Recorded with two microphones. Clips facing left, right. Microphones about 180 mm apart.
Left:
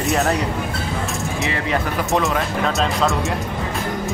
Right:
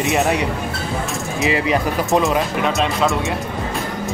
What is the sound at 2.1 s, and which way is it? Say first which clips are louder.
Speech: right 3 dB; 15° right (ahead or behind).